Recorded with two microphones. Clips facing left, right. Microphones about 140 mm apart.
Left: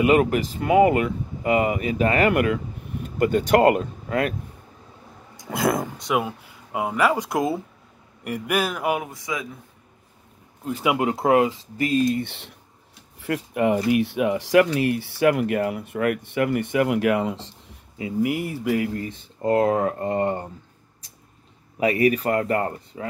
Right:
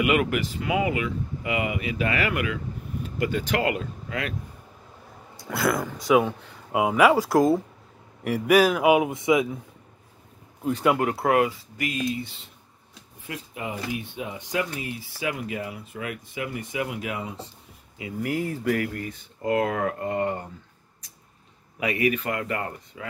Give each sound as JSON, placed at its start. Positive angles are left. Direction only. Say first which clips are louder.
{"t": 0.0, "sound": "speech", "louder": "left 5 dB", "side_deg": 35}
{"t": 5.5, "sound": "speech", "louder": "left 2 dB", "side_deg": 20}
{"t": 5.9, "sound": "speech", "louder": "right 4 dB", "side_deg": 0}
{"t": 6.7, "sound": "a man's voice", "louder": "right 3 dB", "side_deg": -5}
{"t": 9.1, "sound": "speech", "louder": "right 9 dB", "side_deg": -25}
{"t": 10.6, "sound": "speech", "louder": "right 1 dB", "side_deg": 0}
{"t": 11.0, "sound": "speech", "louder": "left 3 dB", "side_deg": 20}
{"t": 12.1, "sound": "speech", "louder": "left 6 dB", "side_deg": 65}
{"t": 18.2, "sound": "speech", "louder": "left 2 dB", "side_deg": 15}
{"t": 21.7, "sound": "speech", "louder": "left 5 dB", "side_deg": 35}